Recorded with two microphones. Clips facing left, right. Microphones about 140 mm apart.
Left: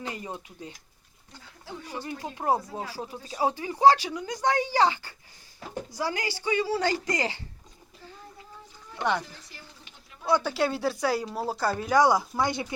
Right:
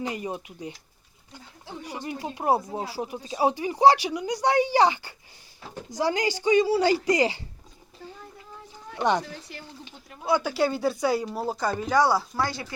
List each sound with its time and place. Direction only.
0.0 s speech: 15° right (ahead or behind)
1.8 s speech: 15° right (ahead or behind)
9.0 s speech: 20° right (ahead or behind)
9.2 s speech: 70° right (ahead or behind)
10.2 s speech: centre (ahead or behind); by 12.7 s 20° left (ahead or behind)